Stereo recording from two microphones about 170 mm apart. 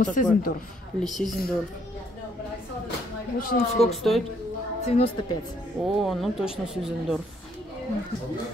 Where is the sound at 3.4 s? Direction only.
60° left (ahead or behind).